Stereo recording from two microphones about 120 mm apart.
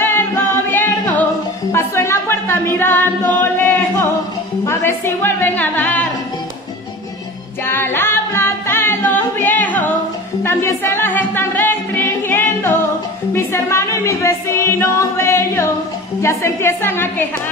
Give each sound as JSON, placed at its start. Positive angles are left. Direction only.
{"t": 0.0, "sound": "music", "side_deg": 20}
{"t": 1.7, "sound": "a capella", "side_deg": 20}
{"t": 4.6, "sound": "speech", "side_deg": 20}
{"t": 7.6, "sound": "music", "side_deg": 20}